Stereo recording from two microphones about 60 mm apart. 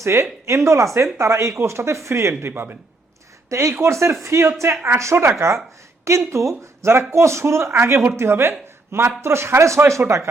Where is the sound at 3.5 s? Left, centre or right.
Right.